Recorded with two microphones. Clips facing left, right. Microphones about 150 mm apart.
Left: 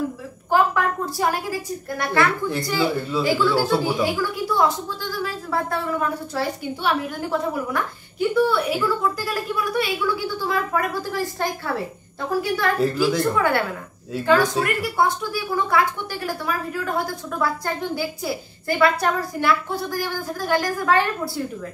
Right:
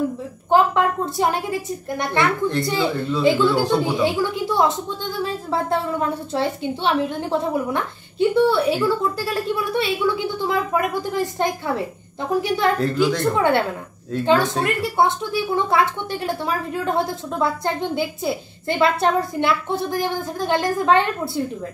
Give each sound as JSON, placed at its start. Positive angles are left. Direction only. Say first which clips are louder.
{"t": 0.5, "sound": "a woman's voice", "louder": "right 3 dB", "side_deg": -25}
{"t": 12.8, "sound": "a woman's voice", "louder": "right 1 dB", "side_deg": 5}
{"t": 13.3, "sound": "a woman's voice", "louder": "right 3 dB", "side_deg": -25}